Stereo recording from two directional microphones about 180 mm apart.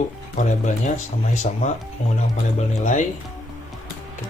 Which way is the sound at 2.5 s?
40° left (ahead or behind).